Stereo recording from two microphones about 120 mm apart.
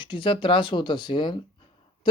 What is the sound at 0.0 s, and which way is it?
Speech, 40° left (ahead or behind).